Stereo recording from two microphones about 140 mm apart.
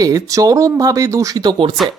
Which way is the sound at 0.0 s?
25° right (ahead or behind).